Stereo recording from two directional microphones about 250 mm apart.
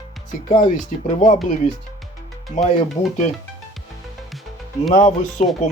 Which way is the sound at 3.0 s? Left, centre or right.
Left.